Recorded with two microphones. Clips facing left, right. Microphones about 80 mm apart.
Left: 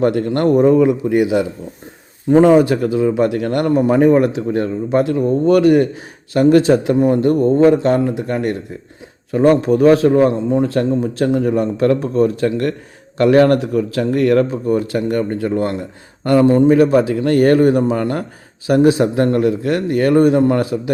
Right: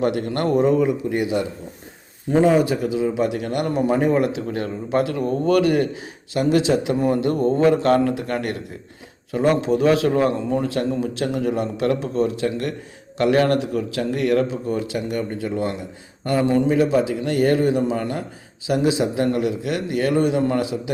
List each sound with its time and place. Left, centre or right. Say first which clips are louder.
0.0 s a man's voice: left 6 dB; left
0.8 s a man's voice: left 7 dB; left
2.3 s speech: left 6 dB; left
2.8 s speech: left 6 dB; left
4.1 s a man's voice: left 6 dB; left
6.3 s a man's voice: left 7 dB; left
9.3 s a man's voice: left 6 dB; left
16.7 s speech: left 6 dB; left